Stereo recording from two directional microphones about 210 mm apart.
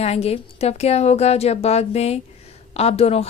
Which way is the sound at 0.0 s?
30° left (ahead or behind).